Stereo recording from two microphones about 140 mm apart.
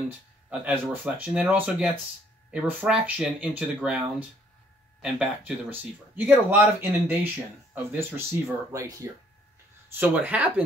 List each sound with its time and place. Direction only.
0.5 s speech: 10° right (ahead or behind)
5.0 s speech: 10° right (ahead or behind)